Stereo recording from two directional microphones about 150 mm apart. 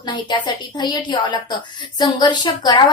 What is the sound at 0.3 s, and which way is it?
A woman's voice, 30° left (ahead or behind).